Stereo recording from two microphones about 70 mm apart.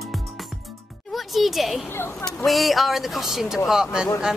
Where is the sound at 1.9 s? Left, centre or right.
Left.